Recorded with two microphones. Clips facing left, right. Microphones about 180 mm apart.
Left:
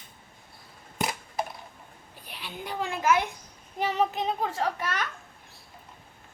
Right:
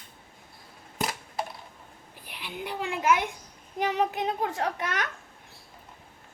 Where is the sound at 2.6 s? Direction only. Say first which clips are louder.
Left 1 dB; 60° right (ahead or behind).